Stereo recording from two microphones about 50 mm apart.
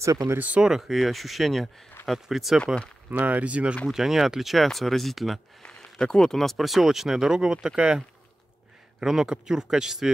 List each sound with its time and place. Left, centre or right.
0.0 s speech: right
0.6 s speech: centre
2.6 s speech: left
3.1 s speech: right
3.9 s speech: centre
5.6 s speech: centre
9.0 s speech: centre